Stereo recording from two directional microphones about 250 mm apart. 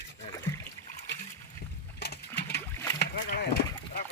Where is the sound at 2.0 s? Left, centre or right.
Left.